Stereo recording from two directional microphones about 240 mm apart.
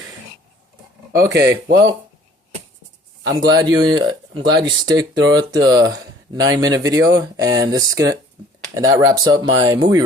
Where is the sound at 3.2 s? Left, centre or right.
Centre.